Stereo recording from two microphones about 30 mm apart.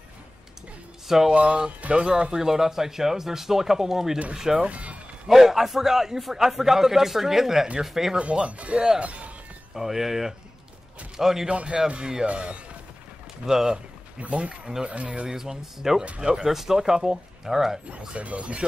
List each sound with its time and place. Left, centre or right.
1.0 s speech: centre
1.3 s speech: right
2.4 s a man's voice: centre
4.6 s speech: right
5.3 s a man's voice: centre
8.2 s speech: right
8.7 s speech: right
9.8 s a man's voice: centre
11.4 s speech: right
13.5 s a man's voice: centre
14.2 s speech: right
15.2 s a man's voice: centre
16.4 s a man's voice: centre
18.1 s speech: right